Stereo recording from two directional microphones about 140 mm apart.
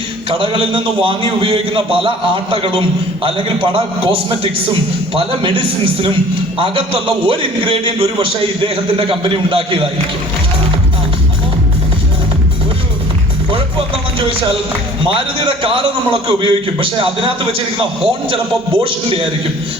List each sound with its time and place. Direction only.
0.3 s a man's voice: 40° right (ahead or behind)
13.5 s a sound: 40° right (ahead or behind)
15.0 s a man's voice: 40° right (ahead or behind)